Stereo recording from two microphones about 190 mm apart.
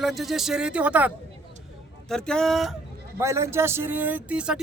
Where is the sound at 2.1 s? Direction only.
5° left (ahead or behind).